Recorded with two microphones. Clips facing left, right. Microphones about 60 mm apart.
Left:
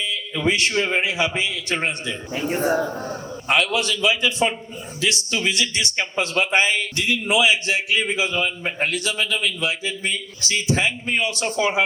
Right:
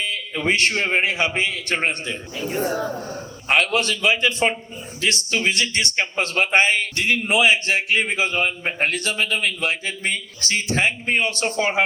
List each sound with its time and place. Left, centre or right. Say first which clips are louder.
0.0 s a man's voice: left 1 dB; right
2.3 s a man's voice: left 3 dB; left
3.5 s a man's voice: right 1 dB; right